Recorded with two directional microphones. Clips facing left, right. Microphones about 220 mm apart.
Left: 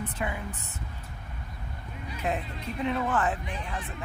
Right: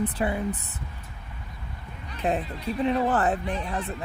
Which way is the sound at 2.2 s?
35° right (ahead or behind).